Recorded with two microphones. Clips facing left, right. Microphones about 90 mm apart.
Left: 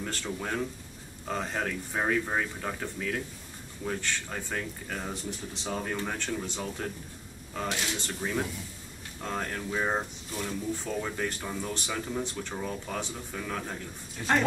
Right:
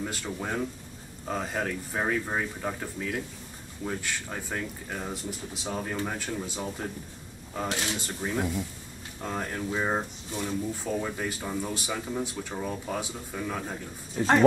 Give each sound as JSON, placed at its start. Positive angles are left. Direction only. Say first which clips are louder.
{"t": 0.0, "sound": "speech", "louder": "right 1 dB", "side_deg": -10}
{"t": 14.1, "sound": "speech", "louder": "right 4 dB", "side_deg": -30}